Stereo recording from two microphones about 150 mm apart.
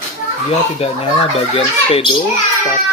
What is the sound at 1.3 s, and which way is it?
Speech, 40° left (ahead or behind).